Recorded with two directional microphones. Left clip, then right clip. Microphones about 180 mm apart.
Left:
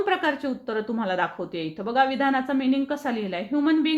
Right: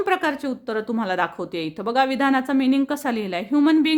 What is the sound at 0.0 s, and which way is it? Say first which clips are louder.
A woman's voice: right 2 dB; 35° right (ahead or behind).